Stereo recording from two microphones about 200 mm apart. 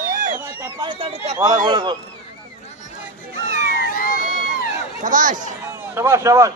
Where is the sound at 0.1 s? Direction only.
40° right (ahead or behind).